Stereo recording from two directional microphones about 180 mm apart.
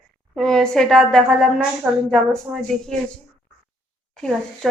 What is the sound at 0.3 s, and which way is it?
Speech, 5° left (ahead or behind).